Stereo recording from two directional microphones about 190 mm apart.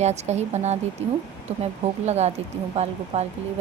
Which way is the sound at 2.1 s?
35° right (ahead or behind).